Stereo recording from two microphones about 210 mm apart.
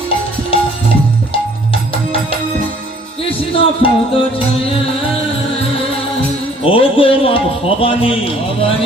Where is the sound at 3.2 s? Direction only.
25° left (ahead or behind).